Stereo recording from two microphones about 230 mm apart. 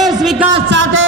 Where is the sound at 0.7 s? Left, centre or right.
Right.